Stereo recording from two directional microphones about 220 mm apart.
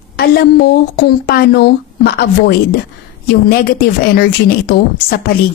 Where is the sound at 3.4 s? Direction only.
45° left (ahead or behind).